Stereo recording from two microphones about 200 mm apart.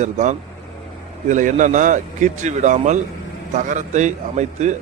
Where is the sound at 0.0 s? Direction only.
35° right (ahead or behind).